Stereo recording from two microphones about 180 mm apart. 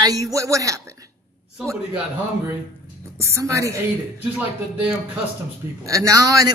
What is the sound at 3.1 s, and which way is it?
Speech, 15° right (ahead or behind).